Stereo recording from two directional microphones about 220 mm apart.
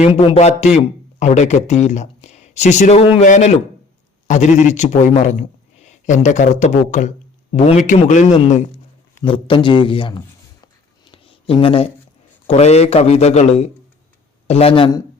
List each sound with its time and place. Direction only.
0.2 s a man's voice: 30° left (ahead or behind)
11.1 s a sound: 25° left (ahead or behind)
12.5 s a man's voice: 30° left (ahead or behind)